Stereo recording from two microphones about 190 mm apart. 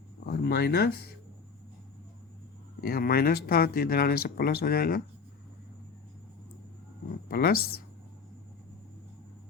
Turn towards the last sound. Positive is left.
turn(degrees=55)  # may be behind; listen again after turning